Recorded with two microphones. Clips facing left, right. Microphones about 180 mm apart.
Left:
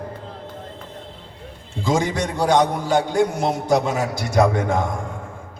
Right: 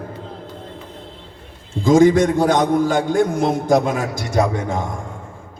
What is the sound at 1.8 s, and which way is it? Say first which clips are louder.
A man's voice: right 9 dB; 50° right (ahead or behind).